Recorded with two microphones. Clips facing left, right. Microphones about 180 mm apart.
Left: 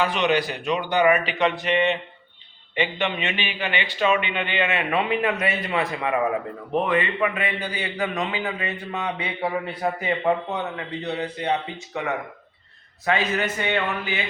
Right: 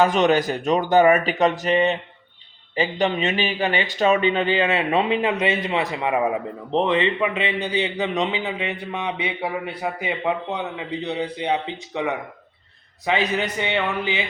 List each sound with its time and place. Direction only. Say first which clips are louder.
0.0 s speech: right 4 dB; 45° right (ahead or behind); by 11.5 s 15° right (ahead or behind)
13.1 s speech: right 1 dB; 15° right (ahead or behind)